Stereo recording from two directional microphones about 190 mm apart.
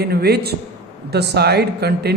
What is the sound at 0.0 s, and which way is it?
A man's voice, 55° right (ahead or behind).